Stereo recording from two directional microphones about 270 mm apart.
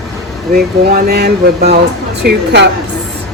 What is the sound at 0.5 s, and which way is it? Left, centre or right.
Speech, right.